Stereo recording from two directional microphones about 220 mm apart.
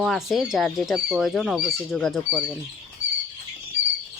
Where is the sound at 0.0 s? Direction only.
Centre (ahead or behind).